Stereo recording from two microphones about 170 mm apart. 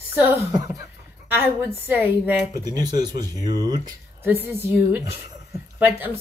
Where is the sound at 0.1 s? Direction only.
15° right (ahead or behind).